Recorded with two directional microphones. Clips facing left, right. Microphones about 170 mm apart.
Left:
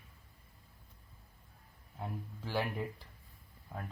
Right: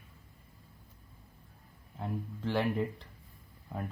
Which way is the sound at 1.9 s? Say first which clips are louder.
Right 5 dB; 5° left (ahead or behind).